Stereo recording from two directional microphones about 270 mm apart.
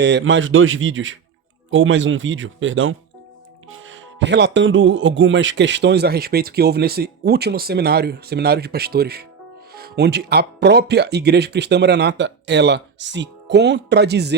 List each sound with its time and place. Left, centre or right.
0.0 s a man's voice: right